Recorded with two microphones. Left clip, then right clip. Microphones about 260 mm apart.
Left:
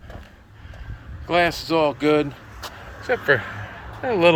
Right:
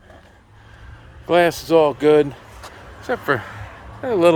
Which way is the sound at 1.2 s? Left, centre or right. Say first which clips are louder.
Right 4 dB; right.